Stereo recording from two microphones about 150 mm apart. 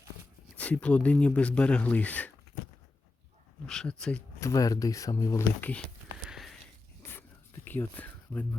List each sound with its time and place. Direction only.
0.5 s speech: 10° left (ahead or behind)
3.7 s speech: 5° left (ahead or behind)
4.4 s speech: 20° left (ahead or behind)
5.5 s speech: 10° left (ahead or behind)
6.2 s a sound: centre (ahead or behind)
7.0 s a sound: 15° left (ahead or behind)